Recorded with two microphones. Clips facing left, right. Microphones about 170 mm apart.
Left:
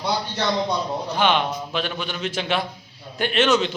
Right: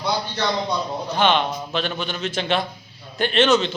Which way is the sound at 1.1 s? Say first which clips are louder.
Right 2 dB; 10° left (ahead or behind).